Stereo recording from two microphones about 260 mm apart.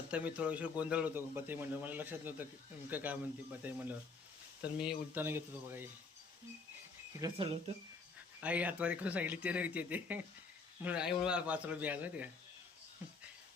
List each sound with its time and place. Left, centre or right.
0.1 s a man's voice: centre
7.2 s speech: centre
8.4 s speech: centre